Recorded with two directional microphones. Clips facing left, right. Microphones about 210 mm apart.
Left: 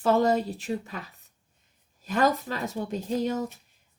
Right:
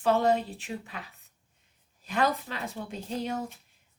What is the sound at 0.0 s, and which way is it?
Speech, 40° left (ahead or behind).